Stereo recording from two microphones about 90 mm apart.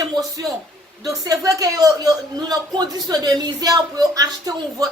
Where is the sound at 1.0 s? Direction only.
40° right (ahead or behind).